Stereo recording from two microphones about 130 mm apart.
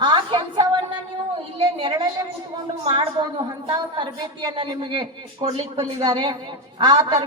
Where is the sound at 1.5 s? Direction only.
40° right (ahead or behind).